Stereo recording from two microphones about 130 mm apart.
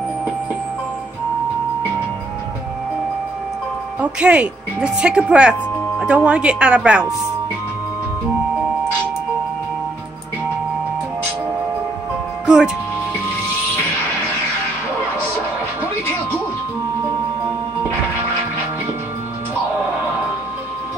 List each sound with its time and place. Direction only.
4.0 s speech: 10° right (ahead or behind)
12.4 s speech: 5° right (ahead or behind)